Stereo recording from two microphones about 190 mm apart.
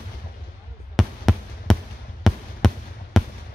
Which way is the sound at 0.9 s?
Centre (ahead or behind).